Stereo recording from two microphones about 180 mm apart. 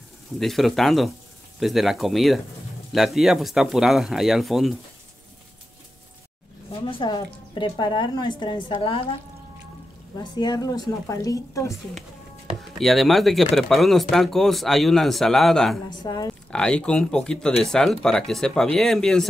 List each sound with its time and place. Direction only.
0.4 s speech: centre (ahead or behind)
6.7 s a woman's voice: 30° left (ahead or behind)
10.1 s a woman's voice: 20° left (ahead or behind)
12.7 s speech: centre (ahead or behind)
15.9 s a woman's voice: 25° left (ahead or behind)
16.4 s speech: 5° left (ahead or behind)